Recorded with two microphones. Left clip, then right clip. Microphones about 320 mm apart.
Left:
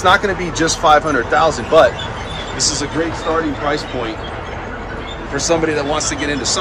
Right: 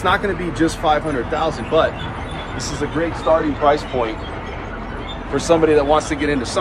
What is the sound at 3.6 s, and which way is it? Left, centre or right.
Speech, centre.